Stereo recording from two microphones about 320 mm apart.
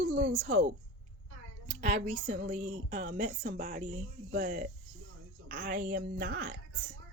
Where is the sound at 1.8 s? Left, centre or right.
Right.